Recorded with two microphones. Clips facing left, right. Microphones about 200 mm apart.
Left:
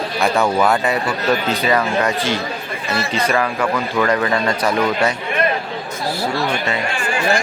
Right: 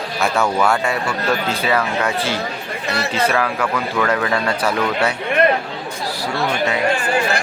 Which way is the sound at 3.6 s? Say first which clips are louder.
Left 2 dB; 10° left (ahead or behind).